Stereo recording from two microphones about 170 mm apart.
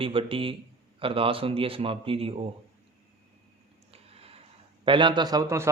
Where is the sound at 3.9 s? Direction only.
35° right (ahead or behind).